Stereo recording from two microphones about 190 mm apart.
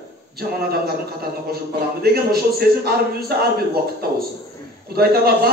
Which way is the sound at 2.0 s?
55° right (ahead or behind).